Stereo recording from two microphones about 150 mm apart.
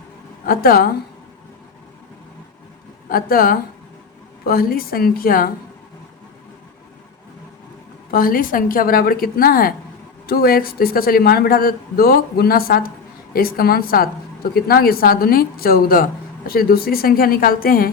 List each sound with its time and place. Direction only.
0.4 s a woman's voice: 80° left
3.1 s a woman's voice: 75° left (ahead or behind)
8.1 s a woman's voice: 70° left (ahead or behind)